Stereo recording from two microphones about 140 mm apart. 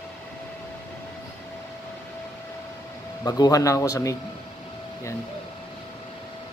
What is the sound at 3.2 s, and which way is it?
Speech, 25° left (ahead or behind).